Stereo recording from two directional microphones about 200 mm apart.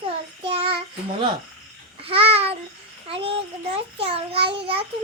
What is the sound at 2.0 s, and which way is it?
Babbling, 30° right (ahead or behind).